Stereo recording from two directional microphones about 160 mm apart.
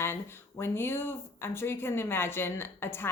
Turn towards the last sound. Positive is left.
turn(degrees=15)  # may be behind; listen again after turning